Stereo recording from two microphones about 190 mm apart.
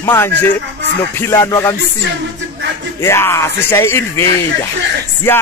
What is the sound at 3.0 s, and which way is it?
Speech, 15° left (ahead or behind).